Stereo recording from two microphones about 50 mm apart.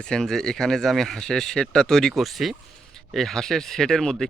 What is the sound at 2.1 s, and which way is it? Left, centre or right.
Speech, centre.